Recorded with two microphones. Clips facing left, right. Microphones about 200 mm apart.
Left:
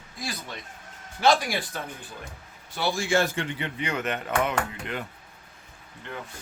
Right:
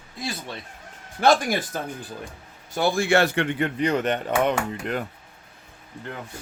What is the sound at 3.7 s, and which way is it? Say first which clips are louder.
Speech: right 6 dB; 35° right (ahead or behind).